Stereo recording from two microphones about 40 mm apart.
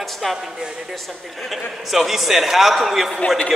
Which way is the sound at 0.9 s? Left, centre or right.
Centre.